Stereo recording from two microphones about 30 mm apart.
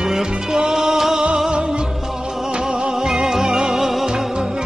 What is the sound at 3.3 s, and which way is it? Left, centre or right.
Music, centre.